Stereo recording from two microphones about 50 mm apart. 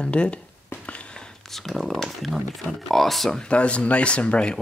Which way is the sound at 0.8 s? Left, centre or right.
Left.